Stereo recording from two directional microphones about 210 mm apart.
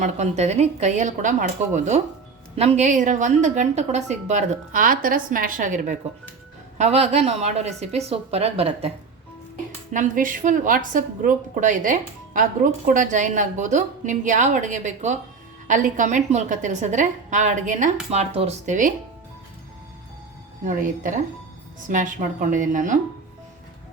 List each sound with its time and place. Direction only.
0.0 s a woman's voice: 30° right (ahead or behind)
9.9 s a woman's voice: 40° right (ahead or behind)
20.7 s a woman's voice: 40° right (ahead or behind)